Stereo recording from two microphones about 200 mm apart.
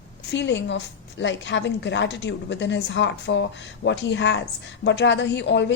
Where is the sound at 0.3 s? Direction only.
60° left (ahead or behind).